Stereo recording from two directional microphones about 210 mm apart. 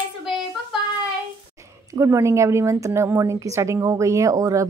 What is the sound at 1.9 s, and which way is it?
A woman's voice, 15° right (ahead or behind).